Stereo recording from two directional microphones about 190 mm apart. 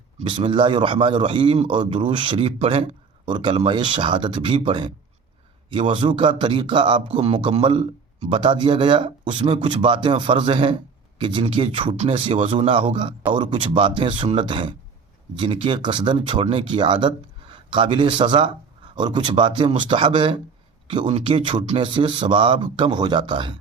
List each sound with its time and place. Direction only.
0.2 s a man's voice: 25° right (ahead or behind)
5.9 s a man's voice: 25° right (ahead or behind)